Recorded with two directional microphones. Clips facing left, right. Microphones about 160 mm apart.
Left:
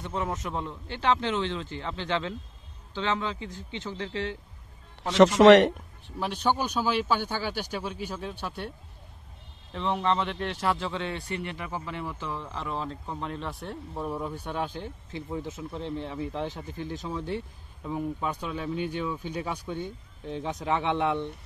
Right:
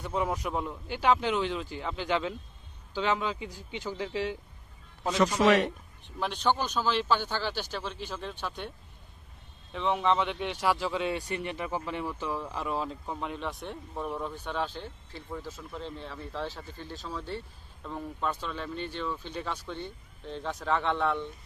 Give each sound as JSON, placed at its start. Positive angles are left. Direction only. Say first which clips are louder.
{"t": 0.0, "sound": "speech", "louder": "right 1 dB", "side_deg": -10}
{"t": 5.1, "sound": "a man's voice", "louder": "left 8 dB", "side_deg": 80}
{"t": 6.1, "sound": "a man's voice", "louder": "left 1 dB", "side_deg": 10}